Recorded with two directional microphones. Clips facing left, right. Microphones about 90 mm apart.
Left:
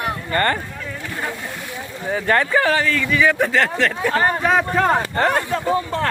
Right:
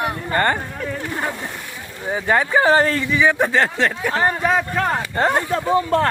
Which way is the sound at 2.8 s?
40° right (ahead or behind).